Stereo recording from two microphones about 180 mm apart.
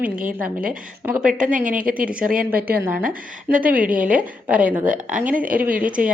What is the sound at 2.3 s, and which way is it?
Speech, 55° right (ahead or behind).